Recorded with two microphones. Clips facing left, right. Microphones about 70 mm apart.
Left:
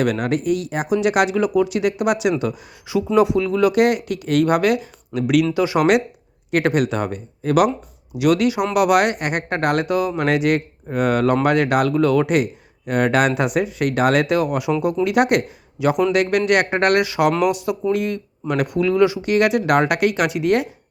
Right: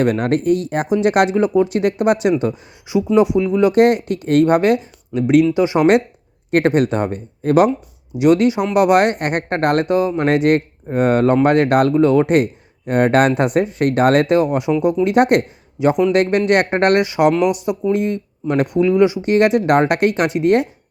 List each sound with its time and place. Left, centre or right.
0.0 s speech: right
2.4 s speech: right
6.5 s speech: right
11.9 s speech: right